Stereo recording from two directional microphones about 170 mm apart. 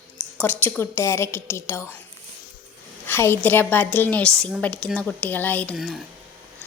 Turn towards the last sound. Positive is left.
turn(degrees=10)  # may be behind; listen again after turning